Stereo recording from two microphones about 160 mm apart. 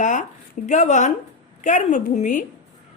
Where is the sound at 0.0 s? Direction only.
50° left (ahead or behind).